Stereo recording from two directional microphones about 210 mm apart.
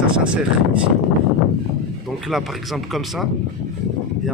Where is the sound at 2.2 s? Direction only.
Centre (ahead or behind).